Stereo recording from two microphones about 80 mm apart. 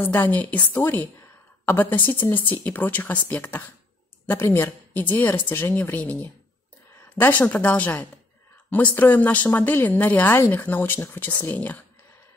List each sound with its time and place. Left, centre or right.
0.1 s speech: centre
8.9 s speech: left